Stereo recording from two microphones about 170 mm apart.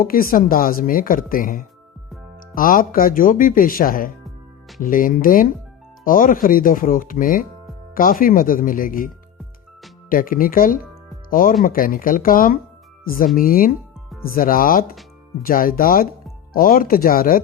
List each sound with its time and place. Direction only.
0.0 s a woman's voice: 60° left (ahead or behind)
10.1 s a woman's voice: 55° left (ahead or behind)